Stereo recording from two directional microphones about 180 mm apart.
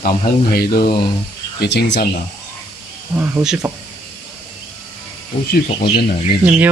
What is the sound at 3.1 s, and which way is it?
Speech, 5° right (ahead or behind).